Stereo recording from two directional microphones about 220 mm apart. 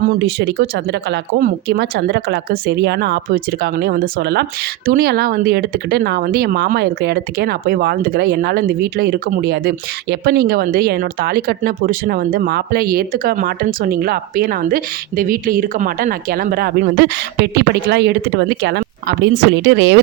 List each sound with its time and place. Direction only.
0.0 s speech: 45° right (ahead or behind)